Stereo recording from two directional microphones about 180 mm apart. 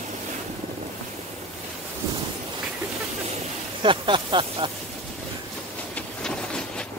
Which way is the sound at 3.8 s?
30° right (ahead or behind).